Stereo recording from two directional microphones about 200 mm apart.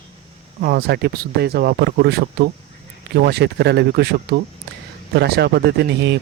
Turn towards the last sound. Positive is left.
turn(degrees=-55)  # may be behind; listen again after turning